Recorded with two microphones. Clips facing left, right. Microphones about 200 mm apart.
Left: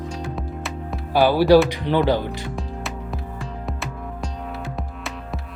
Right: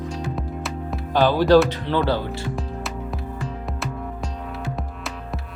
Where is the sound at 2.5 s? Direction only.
Centre (ahead or behind).